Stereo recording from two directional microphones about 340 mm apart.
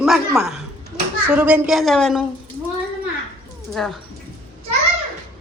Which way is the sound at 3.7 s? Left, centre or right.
Centre.